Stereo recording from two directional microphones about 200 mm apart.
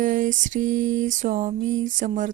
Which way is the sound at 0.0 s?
40° right (ahead or behind).